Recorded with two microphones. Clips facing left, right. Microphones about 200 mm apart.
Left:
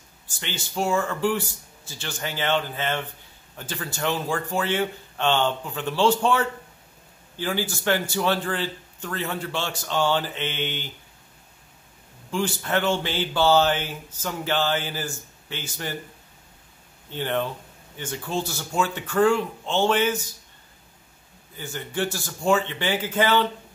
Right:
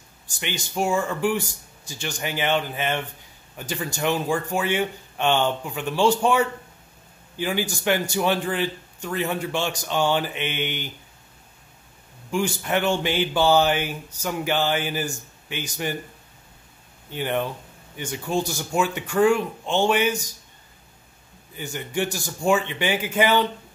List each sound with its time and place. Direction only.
0.3 s speech: 15° right (ahead or behind)
12.3 s speech: 15° right (ahead or behind)
17.1 s speech: 15° right (ahead or behind)
21.5 s speech: 15° right (ahead or behind)